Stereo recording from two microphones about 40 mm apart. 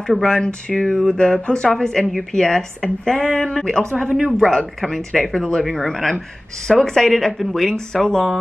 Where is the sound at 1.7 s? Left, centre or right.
Centre.